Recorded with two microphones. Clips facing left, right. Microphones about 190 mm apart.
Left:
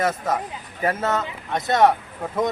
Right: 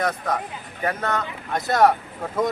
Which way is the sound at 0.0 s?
5° left (ahead or behind).